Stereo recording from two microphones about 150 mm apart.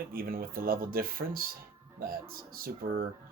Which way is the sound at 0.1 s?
75° right (ahead or behind).